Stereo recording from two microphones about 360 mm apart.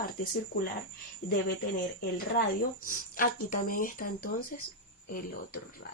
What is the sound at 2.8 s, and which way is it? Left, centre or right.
Speech, left.